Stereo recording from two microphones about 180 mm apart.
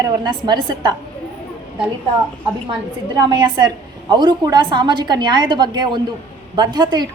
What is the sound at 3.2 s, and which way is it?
A woman's voice, 25° right (ahead or behind).